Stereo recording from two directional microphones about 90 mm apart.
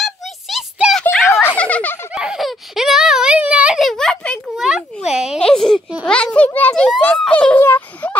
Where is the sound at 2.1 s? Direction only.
5° right (ahead or behind).